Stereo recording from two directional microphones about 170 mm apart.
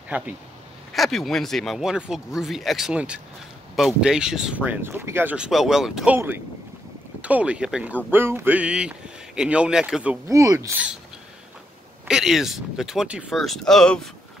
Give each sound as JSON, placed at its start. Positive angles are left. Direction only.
{"t": 0.1, "sound": "speech", "side_deg": -10}
{"t": 10.2, "sound": "speech", "side_deg": -20}
{"t": 12.1, "sound": "speech", "side_deg": -5}